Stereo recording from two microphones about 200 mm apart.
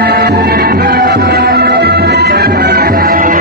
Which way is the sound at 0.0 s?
50° right (ahead or behind).